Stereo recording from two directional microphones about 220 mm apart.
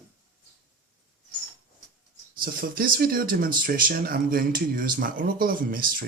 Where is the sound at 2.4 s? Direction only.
40° right (ahead or behind).